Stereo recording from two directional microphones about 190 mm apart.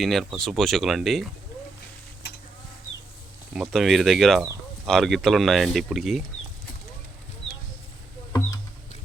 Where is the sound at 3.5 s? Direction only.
Centre (ahead or behind).